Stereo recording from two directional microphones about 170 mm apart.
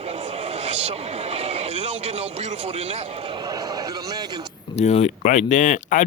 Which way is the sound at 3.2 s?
25° right (ahead or behind).